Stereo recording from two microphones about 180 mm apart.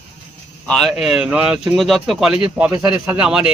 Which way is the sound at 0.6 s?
5° left (ahead or behind).